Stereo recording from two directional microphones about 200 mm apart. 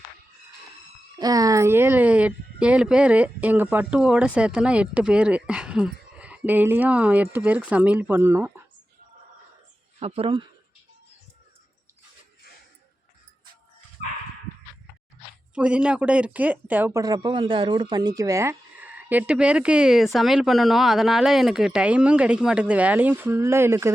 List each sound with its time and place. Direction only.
1.2 s speech: 20° right (ahead or behind)
10.0 s speech: 25° right (ahead or behind)
15.5 s speech: 5° right (ahead or behind)